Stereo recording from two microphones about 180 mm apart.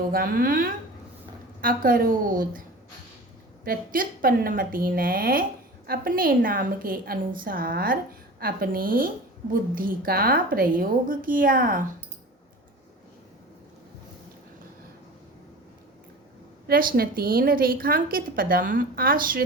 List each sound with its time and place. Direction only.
0.1 s a woman's voice: 50° right (ahead or behind)
3.6 s a woman's voice: 55° right (ahead or behind)
16.6 s a woman's voice: 55° right (ahead or behind)